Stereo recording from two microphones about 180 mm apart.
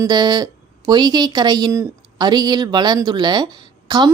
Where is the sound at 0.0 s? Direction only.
25° right (ahead or behind).